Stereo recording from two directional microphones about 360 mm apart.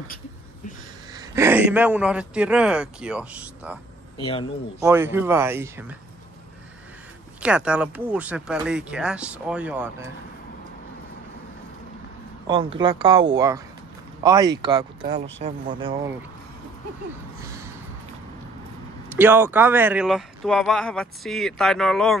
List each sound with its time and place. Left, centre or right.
1.1 s speech: centre
4.2 s a man's voice: centre
4.8 s speech: centre
7.3 s speech: centre
12.4 s speech: centre
15.0 s speech: right
15.4 s speech: centre
19.0 s speech: centre